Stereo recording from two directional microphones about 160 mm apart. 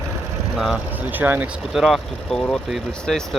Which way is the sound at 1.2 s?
10° right (ahead or behind).